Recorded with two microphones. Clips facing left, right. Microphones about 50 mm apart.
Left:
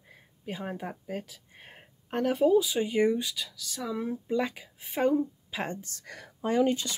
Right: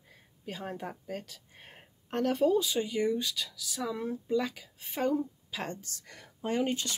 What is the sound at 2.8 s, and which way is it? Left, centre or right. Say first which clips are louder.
Speech: left 4 dB; left.